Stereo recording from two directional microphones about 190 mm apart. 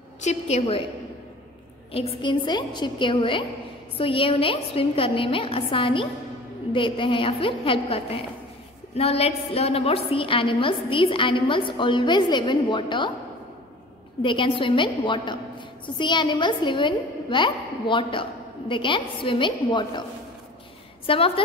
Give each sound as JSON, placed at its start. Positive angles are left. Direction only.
{"t": 0.2, "sound": "a woman's voice", "side_deg": 35}
{"t": 1.9, "sound": "a woman's voice", "side_deg": 30}
{"t": 14.2, "sound": "a woman's voice", "side_deg": 25}
{"t": 21.1, "sound": "a woman's voice", "side_deg": 30}